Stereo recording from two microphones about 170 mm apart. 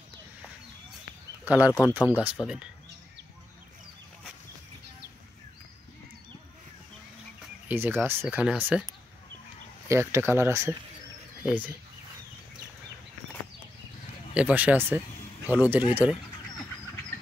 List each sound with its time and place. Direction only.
1.4 s speech: 10° right (ahead or behind)
1.7 s speech: 20° left (ahead or behind)
2.0 s speech: 5° right (ahead or behind)
7.6 s speech: 10° right (ahead or behind)
9.8 s speech: 15° right (ahead or behind)
14.3 s speech: 10° right (ahead or behind)